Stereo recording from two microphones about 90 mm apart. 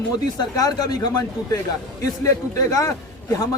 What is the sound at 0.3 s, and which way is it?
Speech, 45° left (ahead or behind).